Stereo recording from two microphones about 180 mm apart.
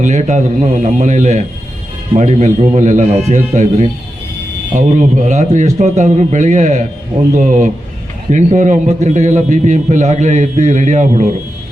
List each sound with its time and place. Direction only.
0.0 s a man's voice: 40° right (ahead or behind)